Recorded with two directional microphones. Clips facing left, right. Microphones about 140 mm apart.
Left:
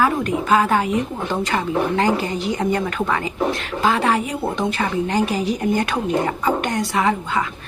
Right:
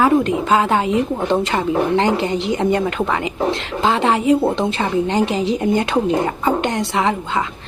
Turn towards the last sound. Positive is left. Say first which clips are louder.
# right 1 dB
turn(degrees=-25)  # may be behind; listen again after turning